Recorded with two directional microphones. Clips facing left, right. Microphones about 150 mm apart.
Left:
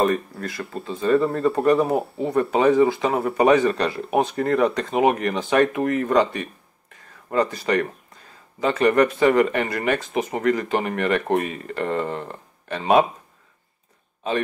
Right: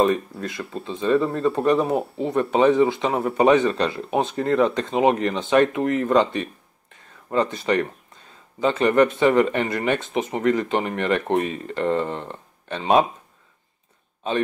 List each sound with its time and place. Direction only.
0.0 s speech: 20° right (ahead or behind)